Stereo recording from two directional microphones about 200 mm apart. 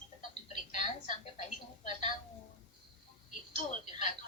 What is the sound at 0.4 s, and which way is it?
Television, 35° left (ahead or behind).